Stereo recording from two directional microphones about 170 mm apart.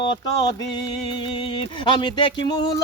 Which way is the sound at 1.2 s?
30° left (ahead or behind).